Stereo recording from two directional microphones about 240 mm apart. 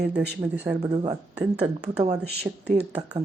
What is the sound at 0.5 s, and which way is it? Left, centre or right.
Speech, centre.